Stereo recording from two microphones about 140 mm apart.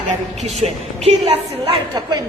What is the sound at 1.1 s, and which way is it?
Speech, 45° right (ahead or behind).